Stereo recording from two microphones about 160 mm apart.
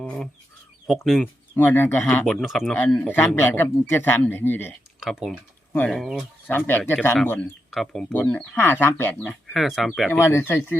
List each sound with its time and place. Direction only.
0.0 s speech: 5° left (ahead or behind)
1.2 s speech: 15° left (ahead or behind)
2.7 s speech: 10° left (ahead or behind)
4.9 s speech: centre (ahead or behind)
6.7 s speech: 15° left (ahead or behind)
7.3 s speech: 5° left (ahead or behind)
9.5 s speech: centre (ahead or behind)
10.1 s speech: 15° left (ahead or behind)